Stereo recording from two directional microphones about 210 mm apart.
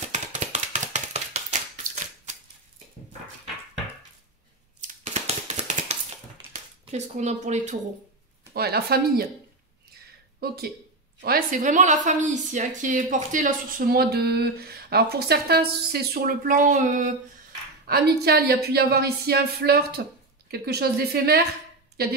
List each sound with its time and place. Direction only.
0.1 s a sound: 35° right (ahead or behind)
4.8 s scissors: 30° right (ahead or behind)
6.5 s speech: 35° right (ahead or behind)
8.5 s a woman's voice: 50° right (ahead or behind)
10.4 s a woman's voice: 50° right (ahead or behind)
17.8 s a woman's voice: 50° right (ahead or behind)